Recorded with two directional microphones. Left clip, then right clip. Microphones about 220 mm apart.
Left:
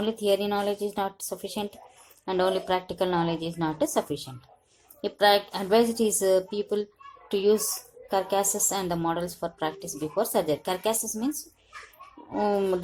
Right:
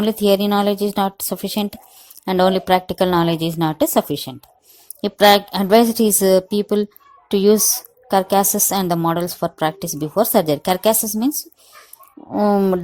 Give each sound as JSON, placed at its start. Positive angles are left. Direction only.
{"t": 0.0, "sound": "a woman's voice", "side_deg": -40}
{"t": 12.3, "sound": "a woman's voice", "side_deg": -35}